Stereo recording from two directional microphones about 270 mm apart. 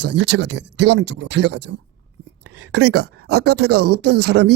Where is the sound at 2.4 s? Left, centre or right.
Right.